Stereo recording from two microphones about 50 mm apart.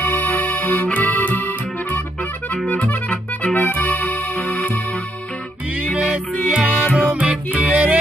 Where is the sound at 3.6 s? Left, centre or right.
Left.